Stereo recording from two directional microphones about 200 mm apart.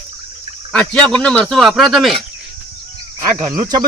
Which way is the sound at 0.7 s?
5° left (ahead or behind).